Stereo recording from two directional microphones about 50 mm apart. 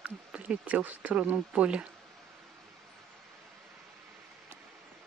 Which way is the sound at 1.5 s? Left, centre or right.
Right.